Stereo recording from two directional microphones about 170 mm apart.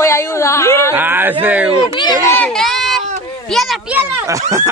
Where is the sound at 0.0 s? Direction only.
15° left (ahead or behind).